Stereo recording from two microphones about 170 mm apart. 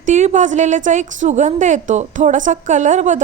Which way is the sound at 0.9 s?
45° right (ahead or behind).